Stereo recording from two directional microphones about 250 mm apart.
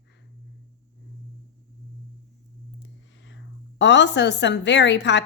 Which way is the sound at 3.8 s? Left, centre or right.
Left.